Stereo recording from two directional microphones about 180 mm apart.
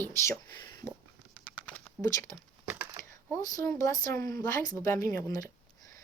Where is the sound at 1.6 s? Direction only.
10° left (ahead or behind).